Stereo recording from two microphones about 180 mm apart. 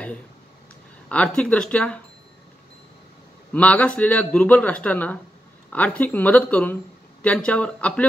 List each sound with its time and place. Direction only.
1.0 s speech: 5° left (ahead or behind)
3.5 s speech: 5° left (ahead or behind)